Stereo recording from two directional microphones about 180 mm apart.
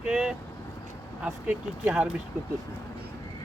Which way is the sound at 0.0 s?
5° right (ahead or behind).